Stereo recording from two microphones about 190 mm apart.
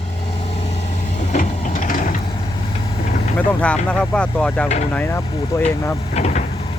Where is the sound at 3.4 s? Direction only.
5° left (ahead or behind).